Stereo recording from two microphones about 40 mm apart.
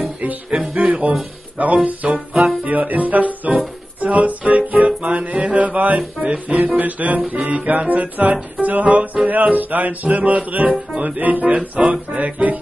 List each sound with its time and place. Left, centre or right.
0.7 s music: right